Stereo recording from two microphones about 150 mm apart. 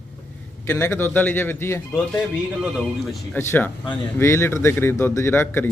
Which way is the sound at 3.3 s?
10° left (ahead or behind).